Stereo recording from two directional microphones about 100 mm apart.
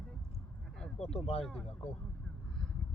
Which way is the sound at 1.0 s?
90° left.